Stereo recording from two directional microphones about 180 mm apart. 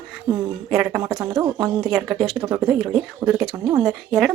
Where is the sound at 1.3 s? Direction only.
15° right (ahead or behind).